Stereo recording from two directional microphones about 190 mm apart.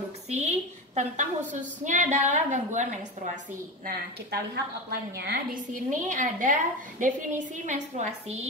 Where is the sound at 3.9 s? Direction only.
60° right (ahead or behind).